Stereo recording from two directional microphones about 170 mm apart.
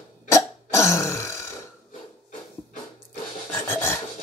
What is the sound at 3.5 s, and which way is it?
Filing, 15° left (ahead or behind).